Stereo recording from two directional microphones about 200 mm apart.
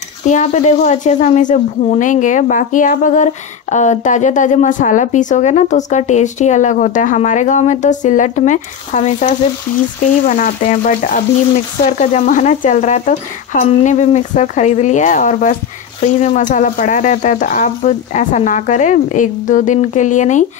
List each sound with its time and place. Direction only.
0.3 s a woman's voice: 35° left (ahead or behind)
10.2 s frying: 45° left (ahead or behind)
12.0 s a woman's voice: 35° left (ahead or behind)